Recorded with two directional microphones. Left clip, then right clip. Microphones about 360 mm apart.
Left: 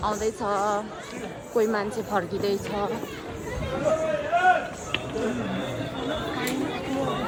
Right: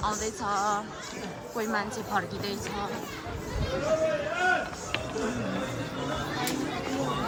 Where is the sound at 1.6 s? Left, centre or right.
Centre.